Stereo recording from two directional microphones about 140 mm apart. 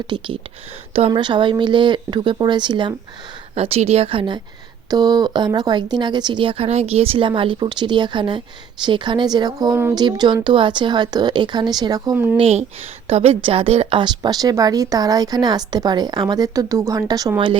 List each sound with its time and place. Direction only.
0.1 s speech: 30° right (ahead or behind)
3.5 s speech: 45° right (ahead or behind); by 12.1 s 30° right (ahead or behind)
12.1 s speech: 15° right (ahead or behind)
12.4 s speech: 50° right (ahead or behind); by 17.6 s 30° right (ahead or behind)